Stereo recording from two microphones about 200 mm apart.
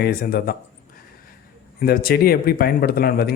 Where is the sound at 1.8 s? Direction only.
50° left (ahead or behind).